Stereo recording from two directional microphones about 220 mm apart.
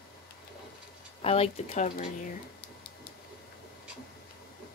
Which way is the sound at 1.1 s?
25° left (ahead or behind).